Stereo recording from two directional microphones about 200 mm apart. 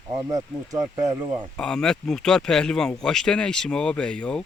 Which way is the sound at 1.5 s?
5° left (ahead or behind).